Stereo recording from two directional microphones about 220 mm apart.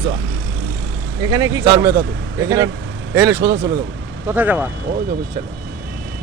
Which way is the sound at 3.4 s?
55° right (ahead or behind).